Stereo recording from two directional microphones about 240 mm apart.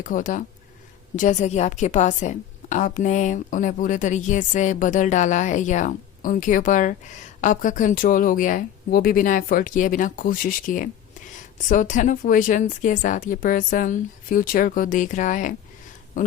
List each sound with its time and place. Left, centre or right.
0.0 s a woman's voice: left